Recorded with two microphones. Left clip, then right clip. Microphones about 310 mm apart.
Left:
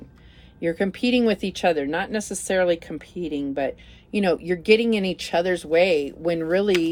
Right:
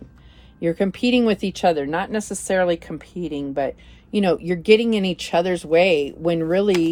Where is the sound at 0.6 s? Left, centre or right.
Right.